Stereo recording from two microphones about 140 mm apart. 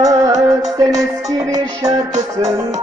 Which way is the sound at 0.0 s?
25° right (ahead or behind).